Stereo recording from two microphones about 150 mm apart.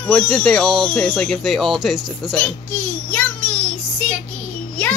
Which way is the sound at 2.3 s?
10° left (ahead or behind).